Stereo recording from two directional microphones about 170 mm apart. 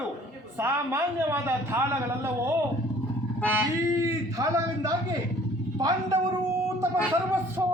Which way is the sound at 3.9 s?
20° right (ahead or behind).